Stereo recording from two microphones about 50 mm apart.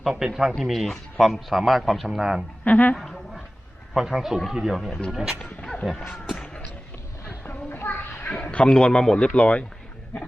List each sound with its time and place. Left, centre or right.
0.0 s speech: centre
0.6 s a man's voice: centre
2.6 s a woman's voice: left
2.9 s speech: centre
3.9 s a man's voice: centre
7.3 s a sound: left
8.3 s speech: left